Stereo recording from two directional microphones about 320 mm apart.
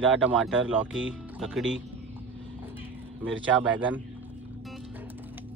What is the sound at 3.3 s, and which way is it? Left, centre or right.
Speech, right.